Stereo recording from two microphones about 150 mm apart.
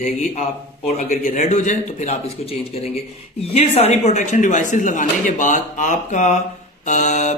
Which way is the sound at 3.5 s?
45° left (ahead or behind).